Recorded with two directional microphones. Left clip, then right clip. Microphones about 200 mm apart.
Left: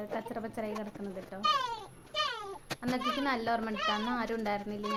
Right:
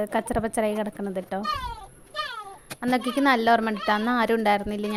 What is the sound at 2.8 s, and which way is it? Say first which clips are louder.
Speech: right 9 dB; 45° right (ahead or behind).